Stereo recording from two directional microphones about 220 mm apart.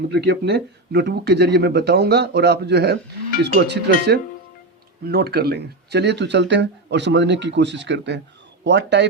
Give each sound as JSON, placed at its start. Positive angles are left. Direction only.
{"t": 0.1, "sound": "speech", "side_deg": -50}